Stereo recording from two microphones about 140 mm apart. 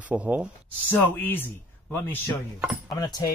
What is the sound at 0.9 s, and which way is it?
Speech, 15° left (ahead or behind).